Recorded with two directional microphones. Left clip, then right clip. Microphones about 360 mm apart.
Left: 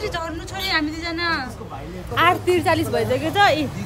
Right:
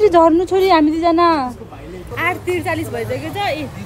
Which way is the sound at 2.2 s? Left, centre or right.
Centre.